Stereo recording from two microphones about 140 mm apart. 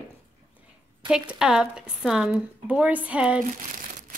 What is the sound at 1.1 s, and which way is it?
Speech, 5° right (ahead or behind).